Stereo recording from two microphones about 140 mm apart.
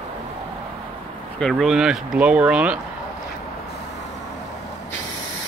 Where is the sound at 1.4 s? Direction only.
Centre (ahead or behind).